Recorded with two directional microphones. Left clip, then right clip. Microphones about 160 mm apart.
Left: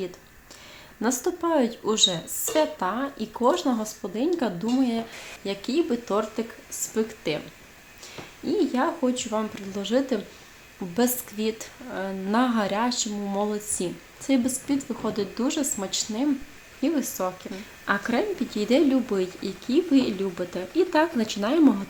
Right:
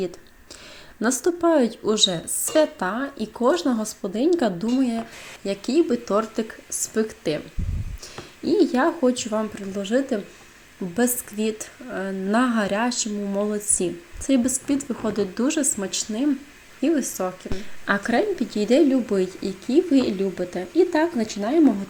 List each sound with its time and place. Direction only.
1.0 s speech: 20° right (ahead or behind)
8.1 s speech: 30° right (ahead or behind)
9.4 s speech: 10° right (ahead or behind)